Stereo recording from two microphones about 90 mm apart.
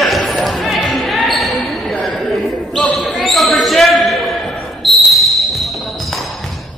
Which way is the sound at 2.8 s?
15° left (ahead or behind).